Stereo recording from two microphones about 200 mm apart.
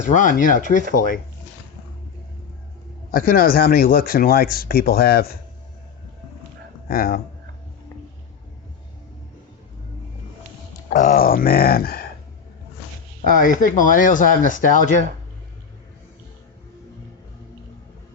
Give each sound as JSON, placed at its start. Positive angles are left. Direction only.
{"t": 0.1, "sound": "speech", "side_deg": 40}
{"t": 3.1, "sound": "speech", "side_deg": 45}
{"t": 6.8, "sound": "speech", "side_deg": 45}
{"t": 10.8, "sound": "speech", "side_deg": 40}
{"t": 13.4, "sound": "speech", "side_deg": 40}